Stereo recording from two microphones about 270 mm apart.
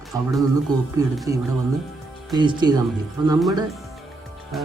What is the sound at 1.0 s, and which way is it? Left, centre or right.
Speech, centre.